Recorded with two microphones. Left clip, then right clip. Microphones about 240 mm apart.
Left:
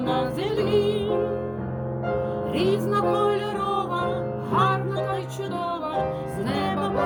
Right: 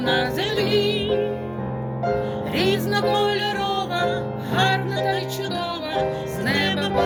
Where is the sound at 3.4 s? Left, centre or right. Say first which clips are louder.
Right 2 dB; right.